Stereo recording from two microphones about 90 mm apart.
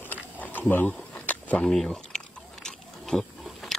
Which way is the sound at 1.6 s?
5° left (ahead or behind).